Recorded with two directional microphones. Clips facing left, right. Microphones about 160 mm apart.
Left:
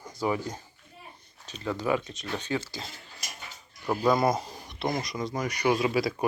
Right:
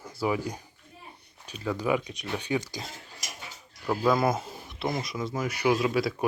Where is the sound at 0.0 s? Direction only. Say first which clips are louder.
Right 1 dB; 5° right (ahead or behind).